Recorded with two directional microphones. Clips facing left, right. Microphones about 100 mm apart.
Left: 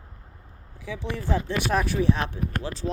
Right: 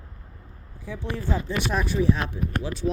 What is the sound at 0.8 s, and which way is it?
Speech, 90° left.